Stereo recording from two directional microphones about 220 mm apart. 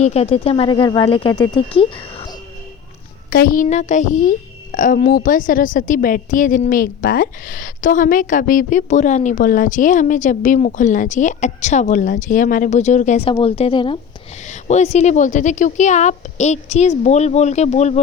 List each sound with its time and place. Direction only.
0.0 s speech: 30° left (ahead or behind)
3.2 s a woman's voice: 40° left (ahead or behind)